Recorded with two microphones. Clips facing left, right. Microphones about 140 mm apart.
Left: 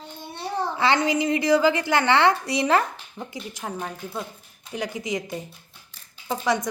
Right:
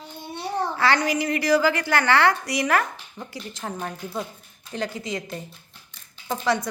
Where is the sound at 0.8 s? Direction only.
20° left (ahead or behind).